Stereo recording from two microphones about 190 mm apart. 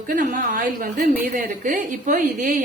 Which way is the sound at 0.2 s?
45° right (ahead or behind).